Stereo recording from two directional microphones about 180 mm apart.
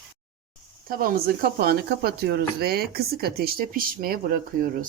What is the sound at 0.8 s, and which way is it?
Speech, 55° right (ahead or behind).